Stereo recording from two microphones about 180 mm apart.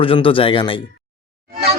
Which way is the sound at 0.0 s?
30° left (ahead or behind).